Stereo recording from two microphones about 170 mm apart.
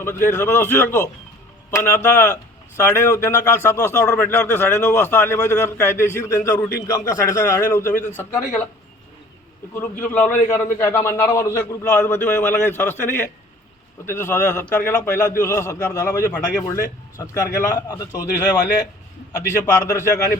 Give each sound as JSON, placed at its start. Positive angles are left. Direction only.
{"t": 0.0, "sound": "a man's voice", "side_deg": 15}
{"t": 9.7, "sound": "a man's voice", "side_deg": 10}